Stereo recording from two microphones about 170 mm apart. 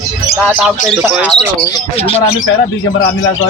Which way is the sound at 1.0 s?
Centre (ahead or behind).